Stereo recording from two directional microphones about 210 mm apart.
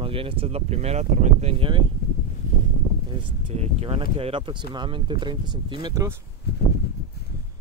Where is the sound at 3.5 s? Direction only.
30° right (ahead or behind).